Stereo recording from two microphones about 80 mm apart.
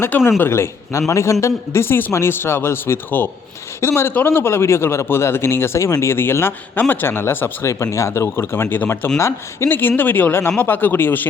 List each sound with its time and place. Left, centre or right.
0.3 s speech: left